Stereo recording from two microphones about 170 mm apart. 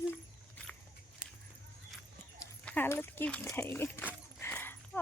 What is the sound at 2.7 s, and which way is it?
A woman's voice, 15° left (ahead or behind).